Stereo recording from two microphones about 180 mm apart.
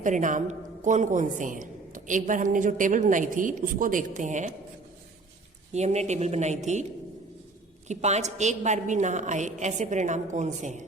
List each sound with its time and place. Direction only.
0.0 s a woman's voice: 45° right (ahead or behind)
5.7 s a woman's voice: 40° right (ahead or behind)
7.9 s a woman's voice: 40° right (ahead or behind)